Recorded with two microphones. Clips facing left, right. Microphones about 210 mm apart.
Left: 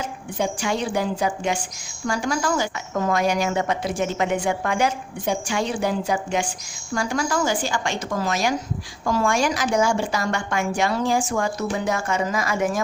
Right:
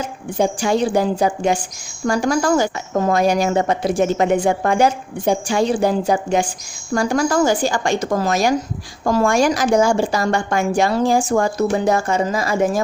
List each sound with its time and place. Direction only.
0.3 s a woman's voice: 35° right (ahead or behind)